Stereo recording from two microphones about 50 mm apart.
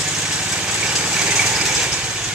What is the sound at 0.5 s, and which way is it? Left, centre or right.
Lawn mower, right.